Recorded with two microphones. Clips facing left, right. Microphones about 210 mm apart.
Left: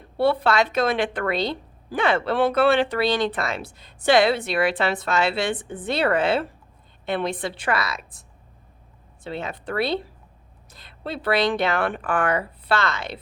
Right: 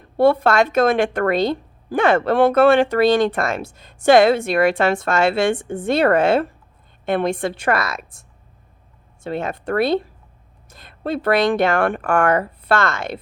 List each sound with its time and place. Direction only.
0.2 s speech: 45° right (ahead or behind)
9.2 s speech: 50° right (ahead or behind)